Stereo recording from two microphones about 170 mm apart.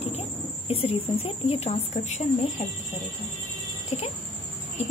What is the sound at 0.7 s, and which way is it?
Speech, 35° left (ahead or behind).